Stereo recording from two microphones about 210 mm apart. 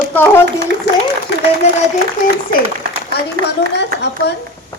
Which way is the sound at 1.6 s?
30° left (ahead or behind).